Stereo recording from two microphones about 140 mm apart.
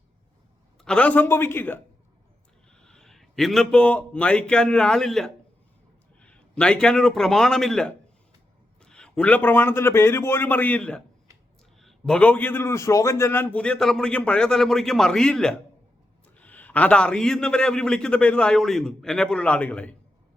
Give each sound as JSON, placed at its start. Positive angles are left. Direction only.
{"t": 0.8, "sound": "a man's voice", "side_deg": 5}
{"t": 2.7, "sound": "a man's voice", "side_deg": 5}